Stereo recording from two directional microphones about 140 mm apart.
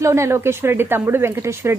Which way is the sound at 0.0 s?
20° right (ahead or behind).